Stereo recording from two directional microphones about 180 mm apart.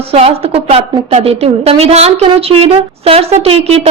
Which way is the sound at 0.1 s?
35° right (ahead or behind).